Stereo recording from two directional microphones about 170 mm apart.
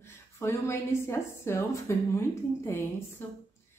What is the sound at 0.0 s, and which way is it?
A woman's voice, 15° left (ahead or behind).